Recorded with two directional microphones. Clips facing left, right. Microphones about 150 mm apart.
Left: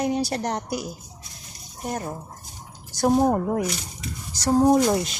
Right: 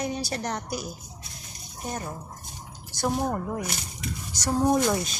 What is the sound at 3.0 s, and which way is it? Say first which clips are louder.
Speech: left 8 dB; 40° left (ahead or behind).